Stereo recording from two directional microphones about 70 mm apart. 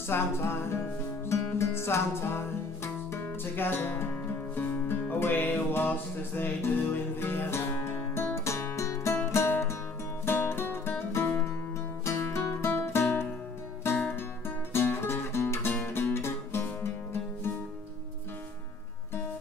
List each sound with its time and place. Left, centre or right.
0.1 s music: left
14.7 s music: left